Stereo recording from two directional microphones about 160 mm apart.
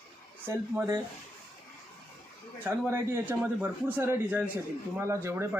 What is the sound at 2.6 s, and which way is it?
A man's voice, 15° right (ahead or behind).